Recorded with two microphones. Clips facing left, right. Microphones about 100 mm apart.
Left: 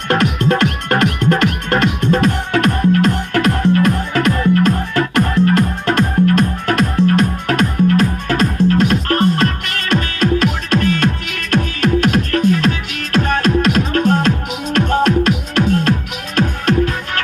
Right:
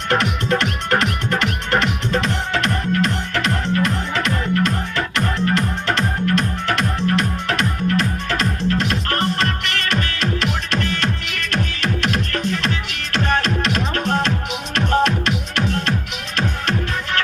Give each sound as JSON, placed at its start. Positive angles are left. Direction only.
{"t": 0.1, "sound": "music", "side_deg": 55}